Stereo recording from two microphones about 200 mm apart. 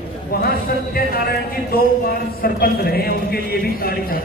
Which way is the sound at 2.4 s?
50° left (ahead or behind).